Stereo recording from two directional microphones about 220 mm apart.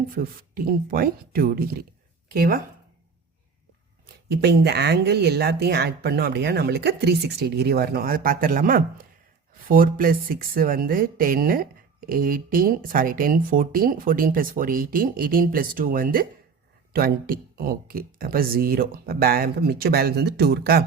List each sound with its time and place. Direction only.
0.1 s speech: 40° right (ahead or behind)
4.3 s speech: 50° right (ahead or behind)